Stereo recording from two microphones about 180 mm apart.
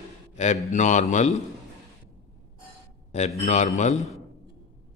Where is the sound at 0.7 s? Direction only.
45° left (ahead or behind).